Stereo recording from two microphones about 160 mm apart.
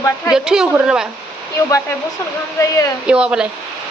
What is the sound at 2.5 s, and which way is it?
Speech, 20° left (ahead or behind).